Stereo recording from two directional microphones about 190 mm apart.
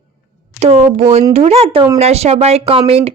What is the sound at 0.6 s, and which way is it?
Speech, 35° right (ahead or behind).